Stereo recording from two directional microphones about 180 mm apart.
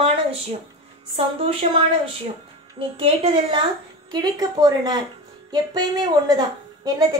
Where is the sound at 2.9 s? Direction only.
30° right (ahead or behind).